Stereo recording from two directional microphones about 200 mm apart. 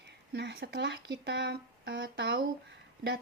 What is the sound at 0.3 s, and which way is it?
A woman's voice, 55° right (ahead or behind).